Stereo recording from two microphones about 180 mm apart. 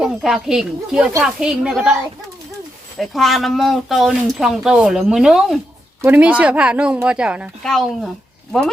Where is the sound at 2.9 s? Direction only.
Centre (ahead or behind).